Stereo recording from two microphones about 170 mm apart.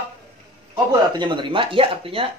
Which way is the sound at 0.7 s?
25° right (ahead or behind).